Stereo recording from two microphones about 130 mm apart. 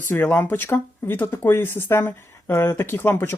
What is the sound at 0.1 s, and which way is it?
Speech, 15° left (ahead or behind).